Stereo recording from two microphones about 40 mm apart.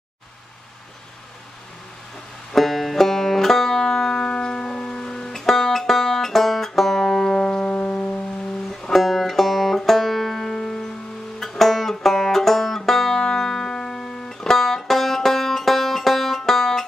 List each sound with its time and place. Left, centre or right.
2.5 s banjo: centre
3.8 s music: centre
7.9 s music: left
8.9 s banjo: centre
13.1 s music: centre